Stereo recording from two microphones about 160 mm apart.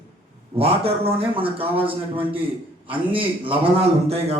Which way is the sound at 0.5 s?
35° right (ahead or behind).